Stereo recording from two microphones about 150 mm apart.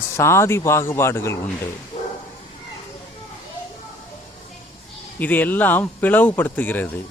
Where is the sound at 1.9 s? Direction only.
45° left (ahead or behind).